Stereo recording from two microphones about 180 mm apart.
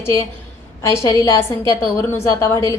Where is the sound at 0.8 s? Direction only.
15° left (ahead or behind).